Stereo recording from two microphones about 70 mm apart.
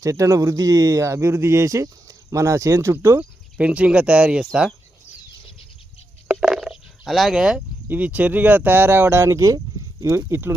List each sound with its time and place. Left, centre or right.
0.0 s speech: right
3.2 s speech: centre
6.4 s a sound: centre
7.9 s speech: right